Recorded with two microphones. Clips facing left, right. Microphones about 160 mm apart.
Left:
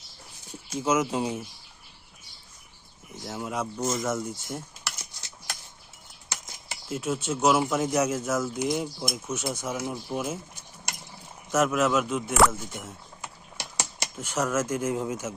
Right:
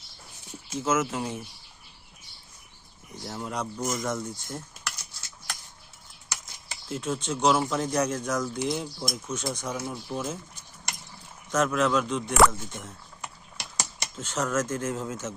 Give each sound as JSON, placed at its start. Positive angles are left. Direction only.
{"t": 0.8, "sound": "speech", "side_deg": 15}
{"t": 3.2, "sound": "speech", "side_deg": 5}
{"t": 6.2, "sound": "a sound", "side_deg": 20}
{"t": 6.8, "sound": "speech", "side_deg": 10}
{"t": 11.5, "sound": "speech", "side_deg": 10}